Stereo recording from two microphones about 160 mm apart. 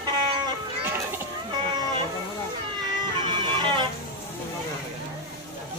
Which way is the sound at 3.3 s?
30° right (ahead or behind).